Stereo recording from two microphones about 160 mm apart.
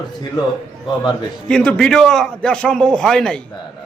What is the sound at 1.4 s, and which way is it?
A man's voice, 5° left (ahead or behind).